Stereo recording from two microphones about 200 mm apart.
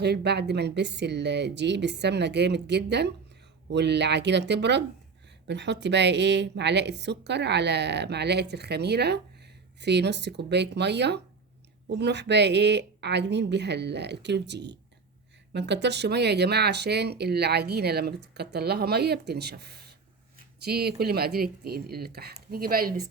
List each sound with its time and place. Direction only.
0.0 s a woman's voice: 55° right (ahead or behind)